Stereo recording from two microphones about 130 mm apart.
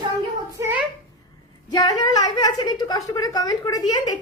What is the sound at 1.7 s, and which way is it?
A woman's voice, 30° left (ahead or behind).